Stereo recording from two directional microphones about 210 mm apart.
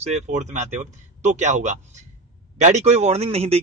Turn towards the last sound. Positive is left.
turn(degrees=-30)  # may be behind; listen again after turning